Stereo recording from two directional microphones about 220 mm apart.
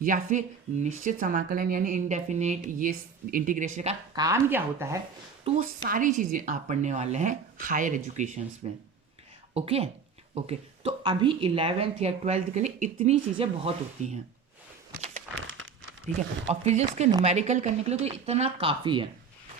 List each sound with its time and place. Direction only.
0.0 s speech: 35° right (ahead or behind)
4.1 s speech: 15° right (ahead or behind)
5.5 s speech: 40° right (ahead or behind)
15.4 s crumpling: 65° right (ahead or behind)
16.1 s speech: 30° right (ahead or behind)